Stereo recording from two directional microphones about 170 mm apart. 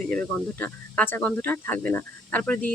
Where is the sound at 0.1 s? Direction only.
10° left (ahead or behind).